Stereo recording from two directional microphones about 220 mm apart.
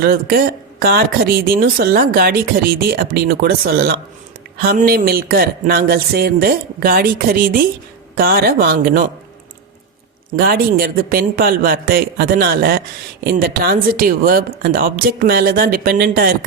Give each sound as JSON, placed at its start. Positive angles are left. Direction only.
{"t": 0.0, "sound": "speech", "side_deg": -40}
{"t": 10.3, "sound": "speech", "side_deg": -45}